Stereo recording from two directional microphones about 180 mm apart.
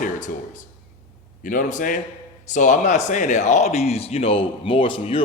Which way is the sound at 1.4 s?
50° left (ahead or behind).